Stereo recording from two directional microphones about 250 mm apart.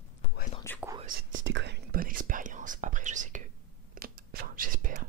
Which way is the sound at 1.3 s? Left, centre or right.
Right.